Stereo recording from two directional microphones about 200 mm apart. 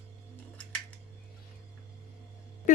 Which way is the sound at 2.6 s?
40° left (ahead or behind).